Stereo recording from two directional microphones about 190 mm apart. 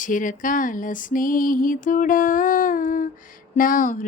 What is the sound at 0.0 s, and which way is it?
Speech, 45° left (ahead or behind).